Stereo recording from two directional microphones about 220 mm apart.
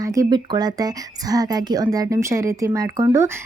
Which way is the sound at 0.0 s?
15° right (ahead or behind).